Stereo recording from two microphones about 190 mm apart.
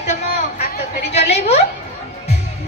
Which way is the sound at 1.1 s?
35° left (ahead or behind).